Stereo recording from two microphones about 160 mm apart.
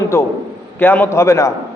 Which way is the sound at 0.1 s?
15° left (ahead or behind).